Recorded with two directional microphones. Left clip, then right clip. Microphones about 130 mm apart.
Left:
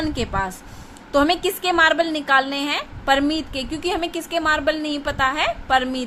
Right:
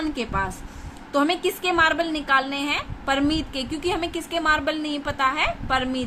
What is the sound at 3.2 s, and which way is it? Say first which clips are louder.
A woman's voice: left 1 dB; 15° left (ahead or behind).